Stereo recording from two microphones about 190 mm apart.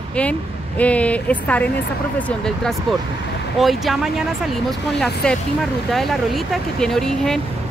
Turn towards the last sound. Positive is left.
turn(degrees=0)  # may be behind; listen again after turning